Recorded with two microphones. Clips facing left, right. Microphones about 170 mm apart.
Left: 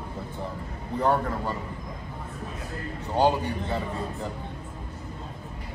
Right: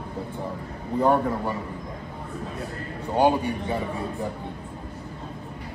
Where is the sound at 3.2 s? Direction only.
15° right (ahead or behind).